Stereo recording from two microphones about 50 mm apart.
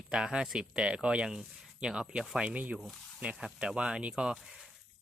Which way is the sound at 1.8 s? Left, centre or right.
Centre.